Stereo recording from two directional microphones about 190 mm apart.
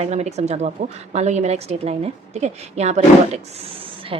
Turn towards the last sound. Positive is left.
turn(degrees=-30)  # may be behind; listen again after turning